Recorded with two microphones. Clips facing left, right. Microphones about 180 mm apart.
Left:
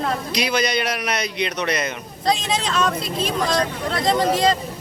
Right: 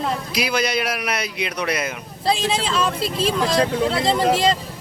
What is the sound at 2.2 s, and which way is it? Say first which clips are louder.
Speech: right 1 dB; 30° right (ahead or behind).